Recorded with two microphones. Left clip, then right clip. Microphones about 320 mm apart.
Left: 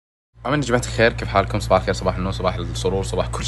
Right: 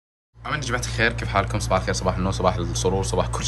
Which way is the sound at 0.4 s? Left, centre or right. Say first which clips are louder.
Left 6 dB; centre.